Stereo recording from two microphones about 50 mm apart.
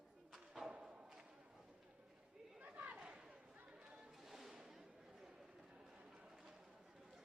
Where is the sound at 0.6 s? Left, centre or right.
Centre.